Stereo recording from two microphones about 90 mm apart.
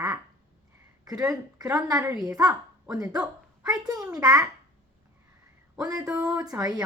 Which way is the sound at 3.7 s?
50° right (ahead or behind).